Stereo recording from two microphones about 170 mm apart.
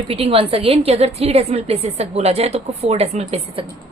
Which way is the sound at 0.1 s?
35° right (ahead or behind).